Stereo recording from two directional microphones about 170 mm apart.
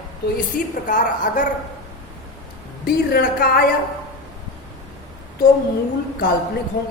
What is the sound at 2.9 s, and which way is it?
Speech, 60° left (ahead or behind).